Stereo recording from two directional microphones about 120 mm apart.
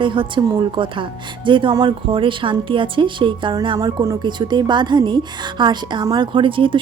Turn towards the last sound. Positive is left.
turn(degrees=-45)  # may be behind; listen again after turning